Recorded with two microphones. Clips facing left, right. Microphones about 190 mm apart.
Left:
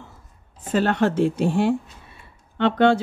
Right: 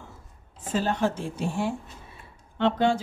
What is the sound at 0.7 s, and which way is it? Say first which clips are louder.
Speech: left 6 dB; 70° left (ahead or behind).